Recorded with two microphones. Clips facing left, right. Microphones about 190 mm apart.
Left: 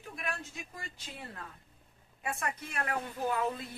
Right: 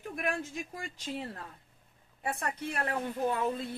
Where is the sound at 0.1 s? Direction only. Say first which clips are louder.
Right 6 dB; 50° right (ahead or behind).